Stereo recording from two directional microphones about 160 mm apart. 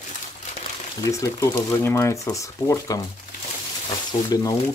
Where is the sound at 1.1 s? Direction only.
20° left (ahead or behind).